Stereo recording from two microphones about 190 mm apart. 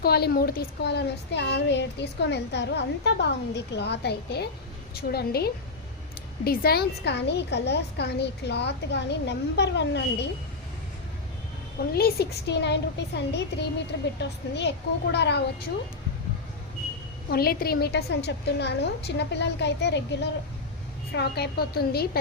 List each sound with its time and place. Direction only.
0.0 s a woman's voice: 55° left (ahead or behind)
11.8 s a woman's voice: 55° left (ahead or behind)
17.2 s a woman's voice: 55° left (ahead or behind)
21.1 s a woman's voice: 60° left (ahead or behind)